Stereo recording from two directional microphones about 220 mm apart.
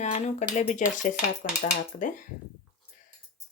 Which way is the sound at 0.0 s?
30° left (ahead or behind).